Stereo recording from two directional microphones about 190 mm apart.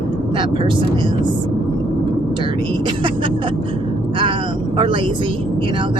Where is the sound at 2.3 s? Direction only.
25° right (ahead or behind).